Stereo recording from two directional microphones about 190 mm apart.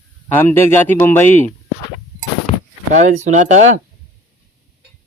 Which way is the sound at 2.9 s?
40° right (ahead or behind).